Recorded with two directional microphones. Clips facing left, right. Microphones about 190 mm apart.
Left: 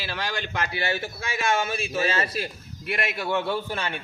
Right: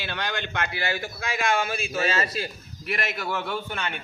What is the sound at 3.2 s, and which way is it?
Speech, 25° left (ahead or behind).